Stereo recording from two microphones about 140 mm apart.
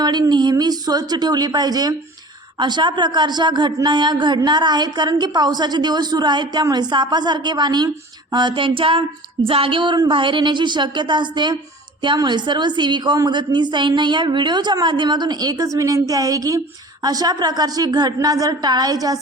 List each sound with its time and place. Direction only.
0.0 s a woman's voice: 30° right (ahead or behind)